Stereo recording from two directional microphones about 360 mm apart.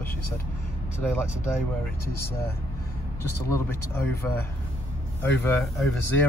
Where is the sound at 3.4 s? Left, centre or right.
Centre.